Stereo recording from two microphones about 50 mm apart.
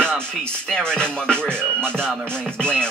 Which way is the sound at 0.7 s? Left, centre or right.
Centre.